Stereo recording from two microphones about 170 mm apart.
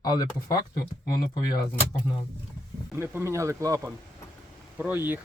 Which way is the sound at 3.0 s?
15° right (ahead or behind).